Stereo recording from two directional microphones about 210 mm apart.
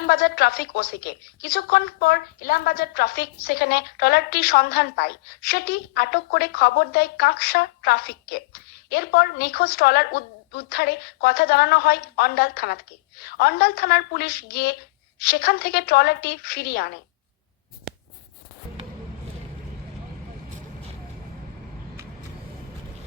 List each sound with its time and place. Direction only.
0.1 s speech: 50° left (ahead or behind)